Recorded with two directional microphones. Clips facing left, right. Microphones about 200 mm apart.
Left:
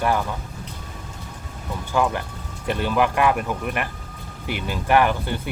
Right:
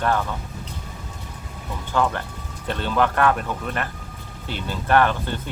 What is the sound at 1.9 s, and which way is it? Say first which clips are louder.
Speech: left 1 dB; 10° left (ahead or behind).